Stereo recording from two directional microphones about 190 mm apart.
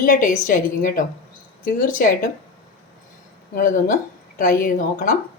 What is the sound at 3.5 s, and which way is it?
Speech, 45° left (ahead or behind).